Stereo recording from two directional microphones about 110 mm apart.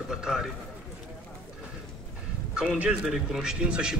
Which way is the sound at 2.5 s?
5° right (ahead or behind).